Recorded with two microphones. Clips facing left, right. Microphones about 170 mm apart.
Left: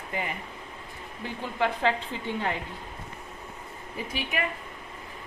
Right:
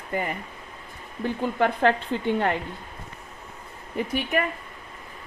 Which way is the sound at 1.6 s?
55° right (ahead or behind).